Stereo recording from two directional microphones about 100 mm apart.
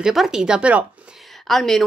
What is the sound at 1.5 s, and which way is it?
Speech, 5° left (ahead or behind).